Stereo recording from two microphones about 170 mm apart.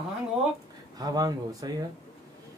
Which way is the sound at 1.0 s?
20° right (ahead or behind).